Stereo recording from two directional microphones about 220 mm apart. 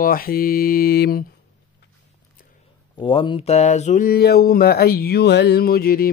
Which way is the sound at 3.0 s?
20° left (ahead or behind).